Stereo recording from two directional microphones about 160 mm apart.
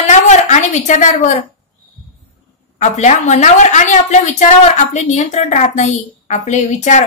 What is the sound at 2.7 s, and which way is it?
A woman's voice, 45° left (ahead or behind).